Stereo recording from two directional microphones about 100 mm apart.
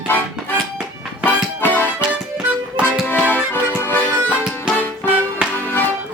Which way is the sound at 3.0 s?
20° left (ahead or behind).